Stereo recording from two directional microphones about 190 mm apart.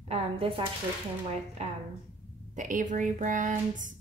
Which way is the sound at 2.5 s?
40° right (ahead or behind).